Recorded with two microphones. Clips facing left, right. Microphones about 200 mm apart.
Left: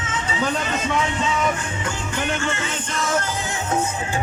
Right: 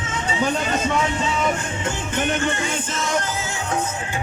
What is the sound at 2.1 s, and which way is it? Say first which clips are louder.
Music: right 3 dB; 20° right (ahead or behind).